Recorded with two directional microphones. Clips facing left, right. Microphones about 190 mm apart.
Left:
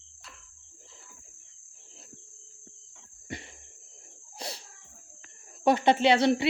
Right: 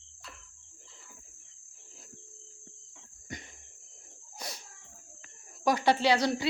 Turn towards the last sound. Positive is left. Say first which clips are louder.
# left 4 dB
turn(degrees=25)  # may be behind; listen again after turning